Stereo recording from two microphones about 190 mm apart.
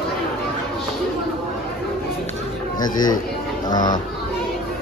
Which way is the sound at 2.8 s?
20° left (ahead or behind).